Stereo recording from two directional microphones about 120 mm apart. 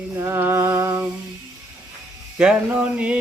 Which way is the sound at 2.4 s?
10° right (ahead or behind).